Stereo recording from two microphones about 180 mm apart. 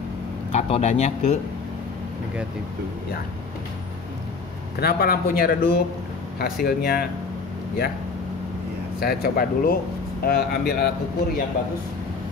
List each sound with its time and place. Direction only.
0.5 s speech: 35° left (ahead or behind)
4.7 s speech: 60° left (ahead or behind)
9.0 s speech: 55° left (ahead or behind)